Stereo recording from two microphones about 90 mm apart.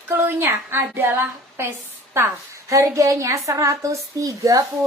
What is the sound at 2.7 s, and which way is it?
A woman's voice, 35° right (ahead or behind).